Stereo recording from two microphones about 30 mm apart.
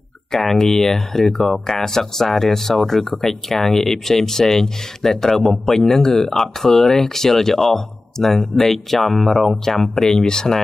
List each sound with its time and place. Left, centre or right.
0.3 s speech: centre